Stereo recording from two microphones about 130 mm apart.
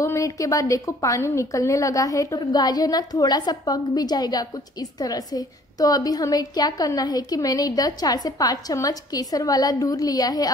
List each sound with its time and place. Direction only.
0.0 s a woman's voice: 20° left (ahead or behind)